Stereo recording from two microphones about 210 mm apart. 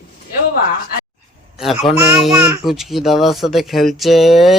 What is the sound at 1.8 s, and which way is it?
Speech, 5° right (ahead or behind).